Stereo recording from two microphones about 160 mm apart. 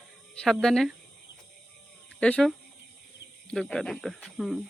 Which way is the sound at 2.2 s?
10° left (ahead or behind).